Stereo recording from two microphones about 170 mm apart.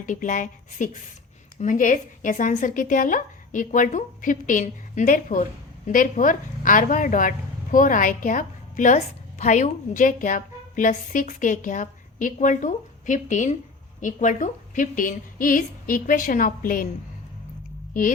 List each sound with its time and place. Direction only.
0.0 s a woman's voice: 50° left (ahead or behind)